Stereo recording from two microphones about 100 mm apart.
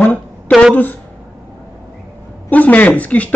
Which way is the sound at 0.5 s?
10° left (ahead or behind).